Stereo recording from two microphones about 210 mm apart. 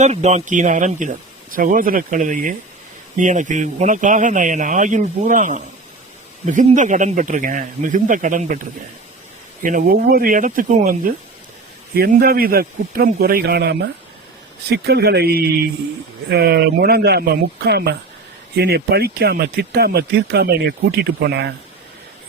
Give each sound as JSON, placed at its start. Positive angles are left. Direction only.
{"t": 0.0, "sound": "speech", "side_deg": -30}
{"t": 9.6, "sound": "speech", "side_deg": -40}